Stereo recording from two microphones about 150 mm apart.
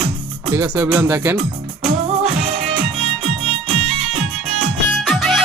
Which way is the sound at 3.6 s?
50° right (ahead or behind).